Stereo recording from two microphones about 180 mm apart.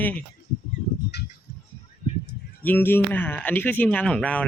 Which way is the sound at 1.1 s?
65° left (ahead or behind).